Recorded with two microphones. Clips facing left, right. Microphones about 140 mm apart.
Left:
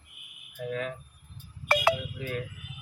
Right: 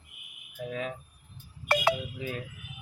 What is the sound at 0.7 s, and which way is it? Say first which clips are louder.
Speech: left 2 dB; 20° right (ahead or behind).